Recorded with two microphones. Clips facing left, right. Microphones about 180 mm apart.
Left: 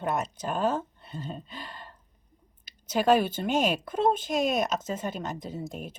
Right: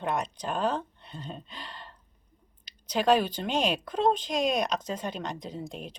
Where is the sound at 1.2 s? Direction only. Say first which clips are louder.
Left 2 dB; 5° left (ahead or behind).